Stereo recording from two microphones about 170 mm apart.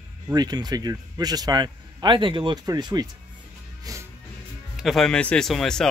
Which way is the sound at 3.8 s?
20° right (ahead or behind).